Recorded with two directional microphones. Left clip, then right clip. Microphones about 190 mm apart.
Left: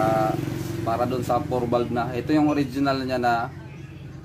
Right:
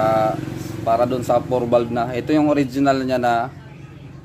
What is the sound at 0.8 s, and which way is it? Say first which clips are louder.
A man's voice: right 7 dB; 40° right (ahead or behind).